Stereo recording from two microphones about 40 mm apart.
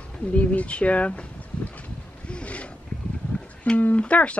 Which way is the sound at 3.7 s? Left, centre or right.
Left.